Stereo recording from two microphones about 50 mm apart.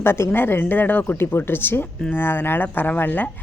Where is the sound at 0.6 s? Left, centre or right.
Left.